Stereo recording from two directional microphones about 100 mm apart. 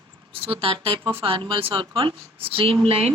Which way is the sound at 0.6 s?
60° right (ahead or behind).